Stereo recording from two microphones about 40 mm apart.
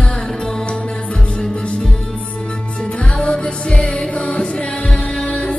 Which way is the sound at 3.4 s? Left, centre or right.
Left.